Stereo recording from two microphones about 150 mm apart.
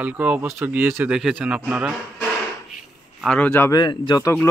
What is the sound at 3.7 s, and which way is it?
Speech, 30° left (ahead or behind).